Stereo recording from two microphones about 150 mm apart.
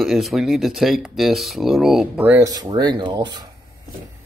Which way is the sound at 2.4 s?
25° right (ahead or behind).